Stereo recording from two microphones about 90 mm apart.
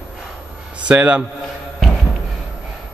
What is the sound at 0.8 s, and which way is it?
Speech, 15° right (ahead or behind).